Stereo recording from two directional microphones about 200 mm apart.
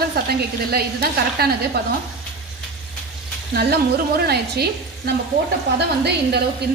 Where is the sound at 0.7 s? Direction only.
50° right (ahead or behind).